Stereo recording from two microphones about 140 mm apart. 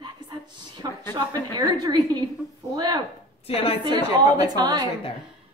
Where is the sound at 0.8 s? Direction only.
25° right (ahead or behind).